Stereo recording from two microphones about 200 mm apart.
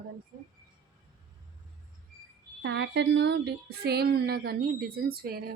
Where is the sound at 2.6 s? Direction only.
60° right (ahead or behind).